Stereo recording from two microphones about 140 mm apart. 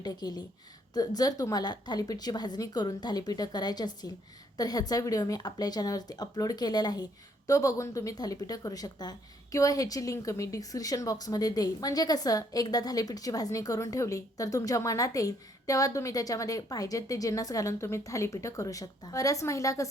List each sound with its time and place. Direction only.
0.0 s speech: 30° left (ahead or behind)